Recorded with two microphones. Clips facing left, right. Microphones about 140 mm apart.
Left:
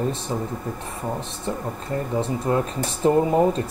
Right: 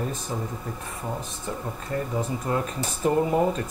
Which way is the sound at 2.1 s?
30° left (ahead or behind).